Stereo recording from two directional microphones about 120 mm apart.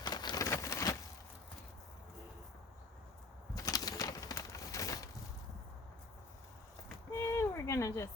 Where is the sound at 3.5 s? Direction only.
30° left (ahead or behind).